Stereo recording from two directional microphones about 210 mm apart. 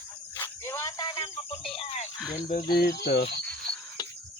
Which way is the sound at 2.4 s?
40° left (ahead or behind).